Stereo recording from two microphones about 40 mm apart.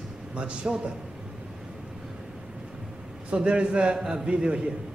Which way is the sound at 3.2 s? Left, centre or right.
Right.